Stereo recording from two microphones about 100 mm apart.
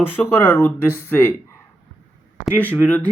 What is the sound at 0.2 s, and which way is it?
Speech, 20° left (ahead or behind).